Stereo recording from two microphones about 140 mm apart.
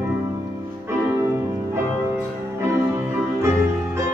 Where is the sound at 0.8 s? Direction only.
20° right (ahead or behind).